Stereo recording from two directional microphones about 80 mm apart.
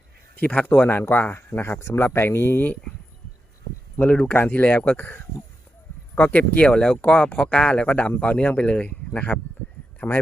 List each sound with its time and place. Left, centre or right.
0.3 s speech: centre
0.9 s speech: left
3.9 s speech: centre